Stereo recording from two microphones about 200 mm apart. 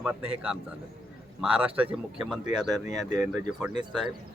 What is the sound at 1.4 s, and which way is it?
Speech, 5° right (ahead or behind).